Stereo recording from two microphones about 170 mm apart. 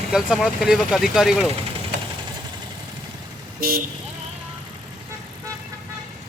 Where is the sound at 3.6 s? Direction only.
60° right (ahead or behind).